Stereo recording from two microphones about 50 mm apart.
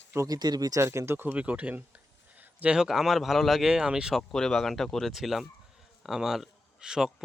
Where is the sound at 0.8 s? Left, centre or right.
Right.